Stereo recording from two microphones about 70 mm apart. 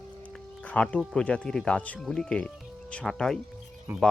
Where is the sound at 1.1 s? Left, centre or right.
Centre.